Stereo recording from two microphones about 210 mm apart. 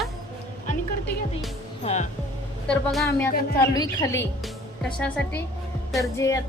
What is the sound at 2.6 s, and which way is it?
Speech, centre (ahead or behind).